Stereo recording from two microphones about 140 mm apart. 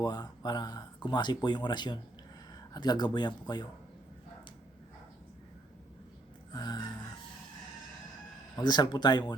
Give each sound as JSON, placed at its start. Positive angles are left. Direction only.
{"t": 0.0, "sound": "speech", "side_deg": 30}
{"t": 6.5, "sound": "music", "side_deg": 30}
{"t": 8.5, "sound": "speech", "side_deg": 30}